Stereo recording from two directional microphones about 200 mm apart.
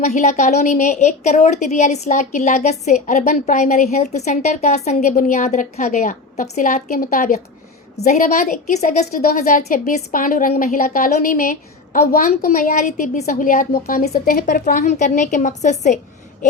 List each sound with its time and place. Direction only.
0.0 s a woman's voice: 35° left (ahead or behind)